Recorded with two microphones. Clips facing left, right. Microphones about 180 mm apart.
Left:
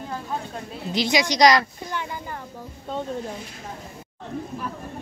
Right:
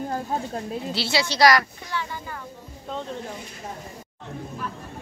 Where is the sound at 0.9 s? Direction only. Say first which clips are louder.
Left 5 dB; 15° left (ahead or behind).